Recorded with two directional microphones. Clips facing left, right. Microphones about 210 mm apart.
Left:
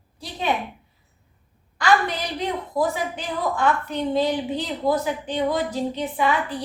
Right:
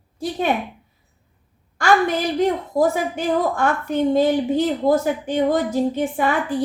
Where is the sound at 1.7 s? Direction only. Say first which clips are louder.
Right 3 dB; 45° right (ahead or behind).